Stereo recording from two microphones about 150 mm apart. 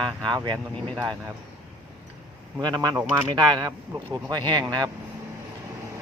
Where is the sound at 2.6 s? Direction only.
30° right (ahead or behind).